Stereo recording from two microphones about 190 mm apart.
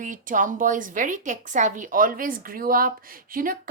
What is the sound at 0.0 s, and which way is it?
A woman's voice, 45° right (ahead or behind).